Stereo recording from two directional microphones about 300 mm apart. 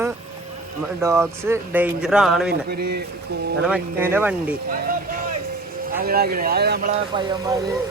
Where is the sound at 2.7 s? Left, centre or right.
Right.